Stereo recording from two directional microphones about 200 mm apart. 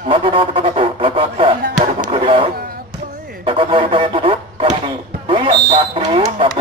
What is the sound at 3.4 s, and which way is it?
Music, 25° right (ahead or behind).